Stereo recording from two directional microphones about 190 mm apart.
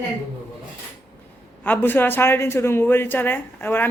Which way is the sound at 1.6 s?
10° left (ahead or behind).